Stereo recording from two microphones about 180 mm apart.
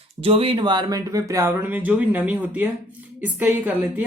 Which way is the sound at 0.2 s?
30° right (ahead or behind).